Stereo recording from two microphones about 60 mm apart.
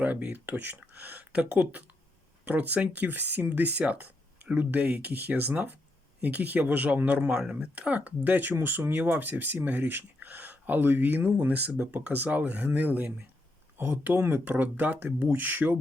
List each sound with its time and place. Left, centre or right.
0.0 s speech: right
4.9 s speech: centre
5.1 s speech: right